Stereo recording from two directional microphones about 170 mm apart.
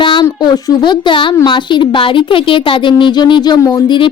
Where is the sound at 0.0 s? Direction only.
30° left (ahead or behind).